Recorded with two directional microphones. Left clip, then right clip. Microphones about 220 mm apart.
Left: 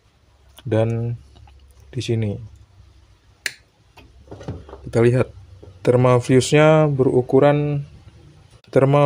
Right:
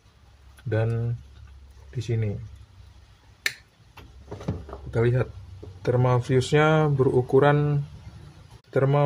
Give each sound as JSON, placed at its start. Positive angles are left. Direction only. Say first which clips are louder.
{"t": 0.7, "sound": "speech", "louder": "left 8 dB", "side_deg": 30}
{"t": 4.9, "sound": "speech", "louder": "left 8 dB", "side_deg": 40}
{"t": 8.6, "sound": "a man's voice", "louder": "left 7 dB", "side_deg": 25}